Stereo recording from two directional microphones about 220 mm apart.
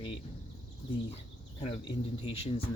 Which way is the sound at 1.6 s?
25° left (ahead or behind).